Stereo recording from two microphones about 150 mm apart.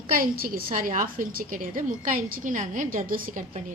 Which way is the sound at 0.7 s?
65° right (ahead or behind).